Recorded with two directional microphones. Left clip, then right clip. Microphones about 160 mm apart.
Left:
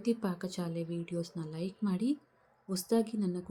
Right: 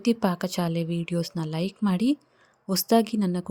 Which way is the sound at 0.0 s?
65° right (ahead or behind).